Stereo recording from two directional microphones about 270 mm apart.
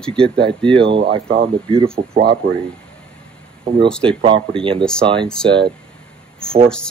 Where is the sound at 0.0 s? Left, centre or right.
Centre.